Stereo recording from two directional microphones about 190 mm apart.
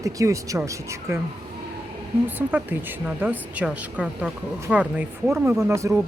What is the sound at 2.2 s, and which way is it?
Speech, 10° right (ahead or behind).